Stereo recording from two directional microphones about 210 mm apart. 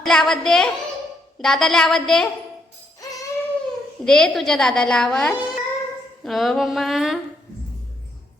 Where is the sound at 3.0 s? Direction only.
15° left (ahead or behind).